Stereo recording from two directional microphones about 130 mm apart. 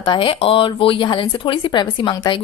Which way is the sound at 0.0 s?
40° left (ahead or behind).